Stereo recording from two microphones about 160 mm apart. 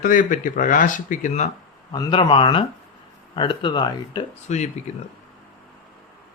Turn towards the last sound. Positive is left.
turn(degrees=45)  # may be behind; listen again after turning